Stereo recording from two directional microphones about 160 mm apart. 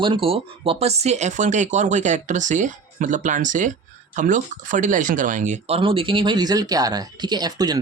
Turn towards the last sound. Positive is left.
turn(degrees=-25)  # may be behind; listen again after turning